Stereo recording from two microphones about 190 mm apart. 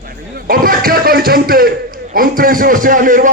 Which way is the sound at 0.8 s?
50° right (ahead or behind).